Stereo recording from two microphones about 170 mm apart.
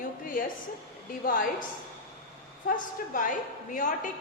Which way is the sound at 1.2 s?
55° left (ahead or behind).